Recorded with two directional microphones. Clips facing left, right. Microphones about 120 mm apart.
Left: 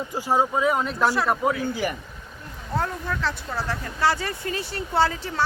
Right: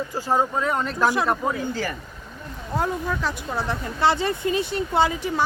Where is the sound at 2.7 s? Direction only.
10° right (ahead or behind).